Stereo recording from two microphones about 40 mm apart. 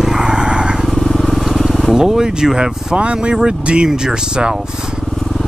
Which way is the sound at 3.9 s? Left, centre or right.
Centre.